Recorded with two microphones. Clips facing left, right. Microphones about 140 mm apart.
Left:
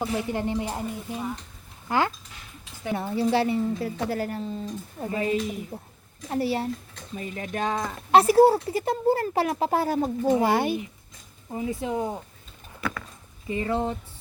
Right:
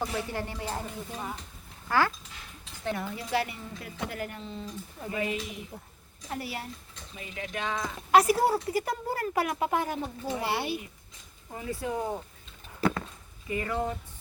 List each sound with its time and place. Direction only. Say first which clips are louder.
0.0 s speech: left 5 dB; 15° left (ahead or behind)
7.2 s speech: left 6 dB; 40° left (ahead or behind)
8.1 s speech: left 6 dB; 30° left (ahead or behind); by 10.8 s 45° left (ahead or behind)
11.5 s speech: left 5 dB; 20° left (ahead or behind)
12.8 s a sound: right 4 dB; 30° right (ahead or behind)
13.5 s speech: left 4 dB; 25° left (ahead or behind)